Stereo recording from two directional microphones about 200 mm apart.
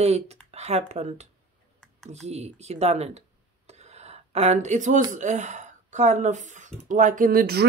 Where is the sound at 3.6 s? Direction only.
35° right (ahead or behind).